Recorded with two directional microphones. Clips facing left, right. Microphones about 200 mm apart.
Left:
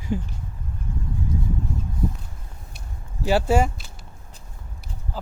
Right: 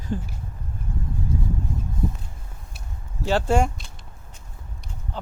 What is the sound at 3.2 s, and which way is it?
Speech, 10° left (ahead or behind).